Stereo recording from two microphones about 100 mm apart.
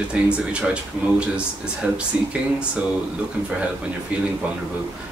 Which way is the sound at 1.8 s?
15° right (ahead or behind).